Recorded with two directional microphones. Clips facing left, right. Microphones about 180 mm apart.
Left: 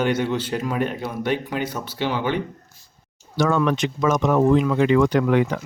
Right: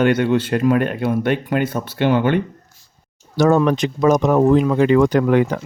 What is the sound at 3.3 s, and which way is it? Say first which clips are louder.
Speech: right 5 dB; 40° right (ahead or behind).